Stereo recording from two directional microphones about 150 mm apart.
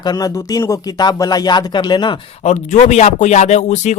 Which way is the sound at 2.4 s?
45° left (ahead or behind).